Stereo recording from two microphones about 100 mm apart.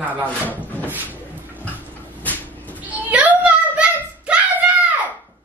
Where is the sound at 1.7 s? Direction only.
15° left (ahead or behind).